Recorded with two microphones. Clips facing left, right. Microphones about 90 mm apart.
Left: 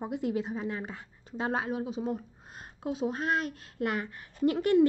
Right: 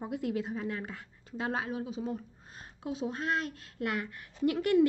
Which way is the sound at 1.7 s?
45° left (ahead or behind).